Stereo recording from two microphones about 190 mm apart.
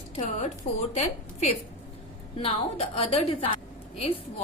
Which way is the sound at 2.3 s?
30° left (ahead or behind).